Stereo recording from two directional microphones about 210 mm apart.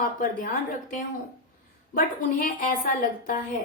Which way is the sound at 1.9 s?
40° left (ahead or behind).